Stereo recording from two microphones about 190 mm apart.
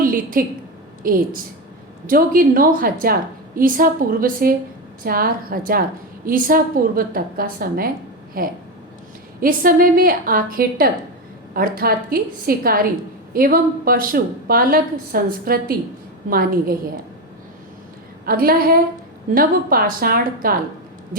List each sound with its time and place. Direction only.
0.0 s a sound: 50° right (ahead or behind)
1.0 s a woman's voice: 50° right (ahead or behind)
18.3 s a woman's voice: 50° right (ahead or behind)